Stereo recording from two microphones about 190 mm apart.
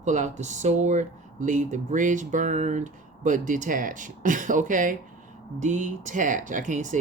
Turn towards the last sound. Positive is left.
turn(degrees=-40)  # may be behind; listen again after turning